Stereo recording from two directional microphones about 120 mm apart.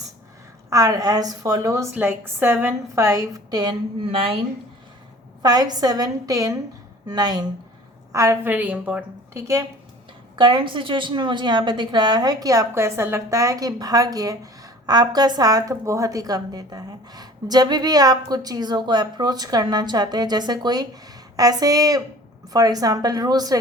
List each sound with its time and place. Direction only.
0.7 s a woman's voice: 30° right (ahead or behind); by 4.4 s 50° right (ahead or behind)
5.4 s a woman's voice: 35° right (ahead or behind)
8.1 s a woman's voice: 25° right (ahead or behind)
9.3 s a woman's voice: 25° right (ahead or behind)
10.3 s a woman's voice: 40° right (ahead or behind)